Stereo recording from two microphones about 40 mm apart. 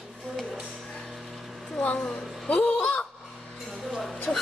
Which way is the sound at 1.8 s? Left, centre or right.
Left.